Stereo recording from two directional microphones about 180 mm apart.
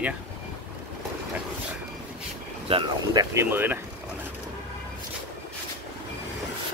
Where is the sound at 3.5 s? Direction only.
10° right (ahead or behind).